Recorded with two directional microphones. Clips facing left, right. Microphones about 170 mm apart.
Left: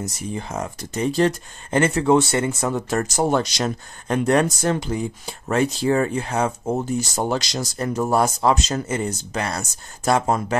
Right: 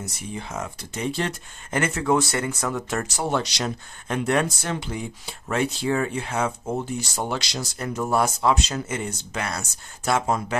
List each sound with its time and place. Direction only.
0.0 s speech: 40° left (ahead or behind)